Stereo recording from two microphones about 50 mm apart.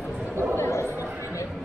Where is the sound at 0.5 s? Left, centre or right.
Left.